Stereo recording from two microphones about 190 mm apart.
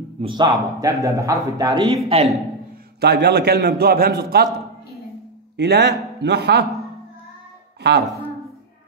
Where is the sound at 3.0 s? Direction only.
60° right (ahead or behind).